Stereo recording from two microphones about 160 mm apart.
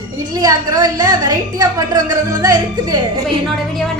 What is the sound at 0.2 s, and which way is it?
A woman's voice, 25° right (ahead or behind).